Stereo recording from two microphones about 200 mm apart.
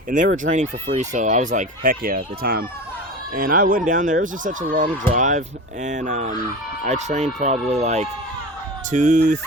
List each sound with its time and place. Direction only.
0.1 s speech: 40° right (ahead or behind)